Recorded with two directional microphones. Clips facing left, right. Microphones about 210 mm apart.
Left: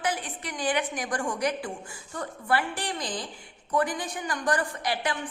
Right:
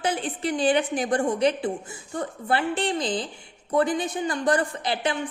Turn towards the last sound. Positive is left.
turn(degrees=-25)  # may be behind; listen again after turning